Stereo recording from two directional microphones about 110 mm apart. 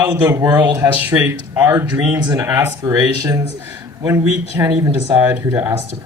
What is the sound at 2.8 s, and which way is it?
Speech, 35° right (ahead or behind).